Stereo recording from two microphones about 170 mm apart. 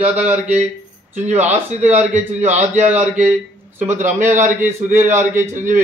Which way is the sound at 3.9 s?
45° right (ahead or behind).